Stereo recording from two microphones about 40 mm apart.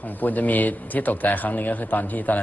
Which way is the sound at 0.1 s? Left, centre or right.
Left.